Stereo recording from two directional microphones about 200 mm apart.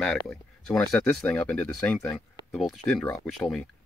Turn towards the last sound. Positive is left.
turn(degrees=0)  # may be behind; listen again after turning